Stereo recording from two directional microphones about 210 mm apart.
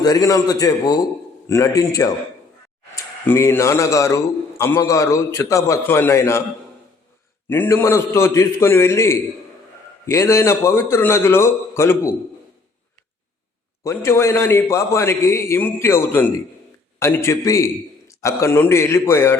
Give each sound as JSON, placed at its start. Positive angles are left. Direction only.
{"t": 0.0, "sound": "a man's voice", "side_deg": 20}
{"t": 7.5, "sound": "a man's voice", "side_deg": 10}
{"t": 13.8, "sound": "a man's voice", "side_deg": 10}